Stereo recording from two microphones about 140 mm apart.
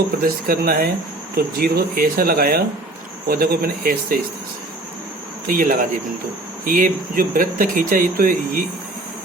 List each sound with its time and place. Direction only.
0.2 s speech: 90° right
5.5 s speech: 80° right